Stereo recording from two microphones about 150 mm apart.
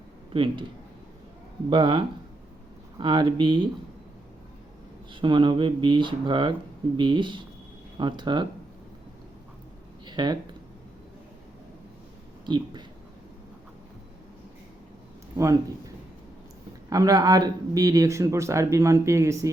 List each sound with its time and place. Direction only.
0.3 s speech: 35° right (ahead or behind)
1.7 s speech: 35° right (ahead or behind)
5.2 s speech: 35° right (ahead or behind)
10.1 s a sound: 30° right (ahead or behind)
12.5 s speech: 30° right (ahead or behind)
16.9 s speech: 25° right (ahead or behind)